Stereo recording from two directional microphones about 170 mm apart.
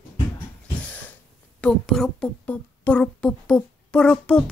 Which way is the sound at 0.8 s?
10° left (ahead or behind).